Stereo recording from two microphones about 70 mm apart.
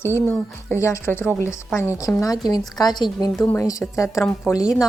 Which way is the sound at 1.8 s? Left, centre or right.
Left.